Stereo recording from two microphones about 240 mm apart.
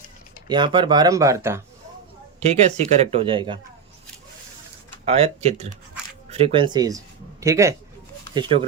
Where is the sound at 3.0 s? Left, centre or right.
Right.